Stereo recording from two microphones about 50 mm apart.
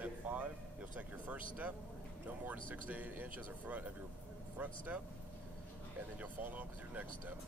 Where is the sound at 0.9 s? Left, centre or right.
Right.